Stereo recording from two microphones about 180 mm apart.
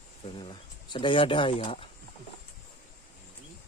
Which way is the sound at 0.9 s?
25° left (ahead or behind).